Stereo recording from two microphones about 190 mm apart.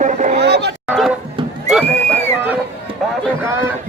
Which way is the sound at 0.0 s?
40° right (ahead or behind).